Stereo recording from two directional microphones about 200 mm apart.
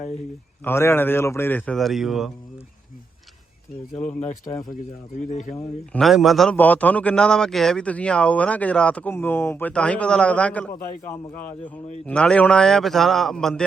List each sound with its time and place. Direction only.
0.6 s a man's voice: 10° left (ahead or behind)
3.9 s speech: 35° left (ahead or behind)
6.0 s a man's voice: centre (ahead or behind)